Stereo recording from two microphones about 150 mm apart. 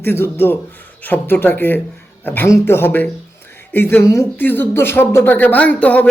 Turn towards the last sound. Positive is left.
turn(degrees=10)  # may be behind; listen again after turning